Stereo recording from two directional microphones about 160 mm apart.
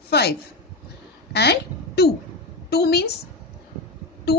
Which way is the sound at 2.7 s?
85° left.